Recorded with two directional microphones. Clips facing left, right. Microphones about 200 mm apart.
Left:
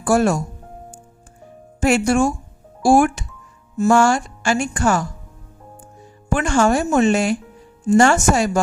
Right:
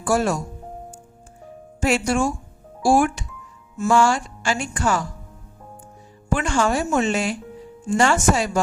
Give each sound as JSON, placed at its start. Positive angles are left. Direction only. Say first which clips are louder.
{"t": 0.0, "sound": "a woman's voice", "louder": "left 4 dB", "side_deg": 50}
{"t": 1.8, "sound": "a woman's voice", "louder": "left 4 dB", "side_deg": 50}
{"t": 6.3, "sound": "a woman's voice", "louder": "left 4 dB", "side_deg": 50}